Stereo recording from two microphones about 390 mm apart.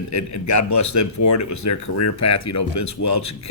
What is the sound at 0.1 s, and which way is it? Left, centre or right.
Speech, left.